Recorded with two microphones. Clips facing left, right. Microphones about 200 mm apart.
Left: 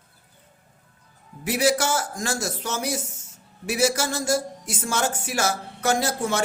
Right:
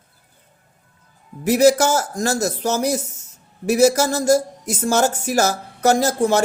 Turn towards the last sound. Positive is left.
turn(degrees=-40)  # may be behind; listen again after turning